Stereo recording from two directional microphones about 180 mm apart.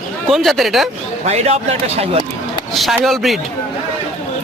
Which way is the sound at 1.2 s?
35° right (ahead or behind).